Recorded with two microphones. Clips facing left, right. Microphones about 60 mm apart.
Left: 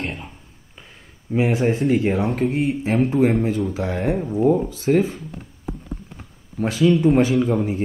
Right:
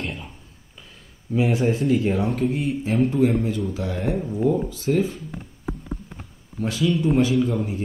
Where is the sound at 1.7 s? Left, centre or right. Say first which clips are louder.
Left 2 dB; left.